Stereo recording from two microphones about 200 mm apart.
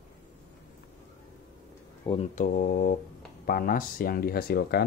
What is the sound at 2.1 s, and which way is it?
Speech, 35° left (ahead or behind).